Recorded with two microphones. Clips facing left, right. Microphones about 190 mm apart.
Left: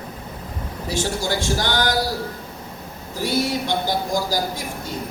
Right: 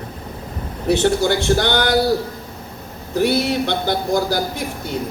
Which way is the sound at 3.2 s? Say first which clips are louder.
Right 5 dB; 65° right (ahead or behind).